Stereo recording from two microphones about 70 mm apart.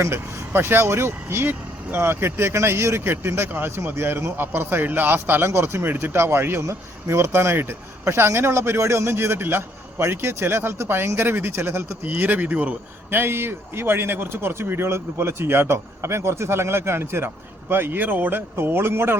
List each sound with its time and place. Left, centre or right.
0.0 s speech: right